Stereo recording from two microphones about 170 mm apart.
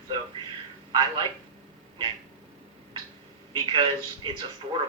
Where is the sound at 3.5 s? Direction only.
30° right (ahead or behind).